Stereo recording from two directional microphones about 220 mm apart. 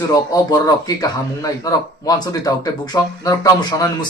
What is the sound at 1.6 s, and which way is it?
Speech, 15° left (ahead or behind).